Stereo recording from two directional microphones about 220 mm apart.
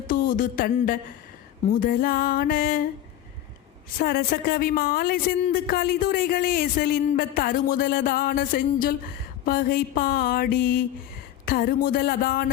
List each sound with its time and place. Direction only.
0.1 s speech: 40° left (ahead or behind)
3.9 s speech: 40° left (ahead or behind)
11.4 s a sound: 45° left (ahead or behind)